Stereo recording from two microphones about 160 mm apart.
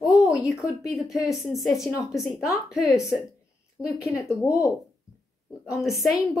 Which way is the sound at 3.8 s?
20° left (ahead or behind).